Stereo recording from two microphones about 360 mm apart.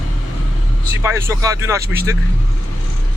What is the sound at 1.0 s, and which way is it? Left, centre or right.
Speech, centre.